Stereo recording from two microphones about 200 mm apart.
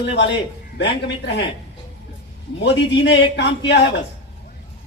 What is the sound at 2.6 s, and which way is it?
A man's voice, 60° left (ahead or behind).